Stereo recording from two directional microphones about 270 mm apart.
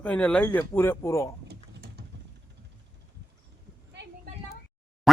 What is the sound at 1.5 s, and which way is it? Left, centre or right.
Typing, right.